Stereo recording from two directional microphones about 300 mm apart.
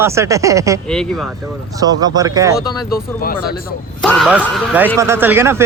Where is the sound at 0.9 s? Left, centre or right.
Centre.